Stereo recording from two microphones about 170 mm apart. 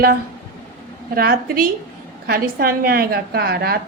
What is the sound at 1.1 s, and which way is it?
A woman's voice, 60° right (ahead or behind).